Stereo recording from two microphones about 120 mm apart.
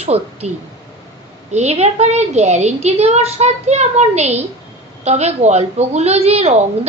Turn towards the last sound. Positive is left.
turn(degrees=-60)  # may be behind; listen again after turning